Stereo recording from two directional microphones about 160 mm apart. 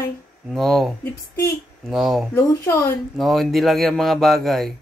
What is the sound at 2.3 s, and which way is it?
Speech, 15° left (ahead or behind).